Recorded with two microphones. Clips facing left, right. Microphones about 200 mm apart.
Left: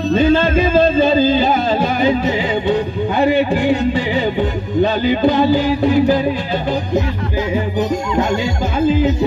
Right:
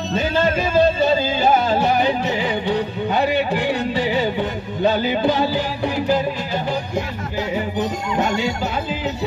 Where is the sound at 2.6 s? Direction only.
55° left (ahead or behind).